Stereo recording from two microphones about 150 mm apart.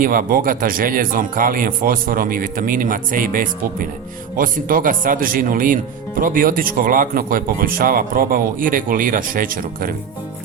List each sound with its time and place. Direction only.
0.0 s speech: 70° right (ahead or behind)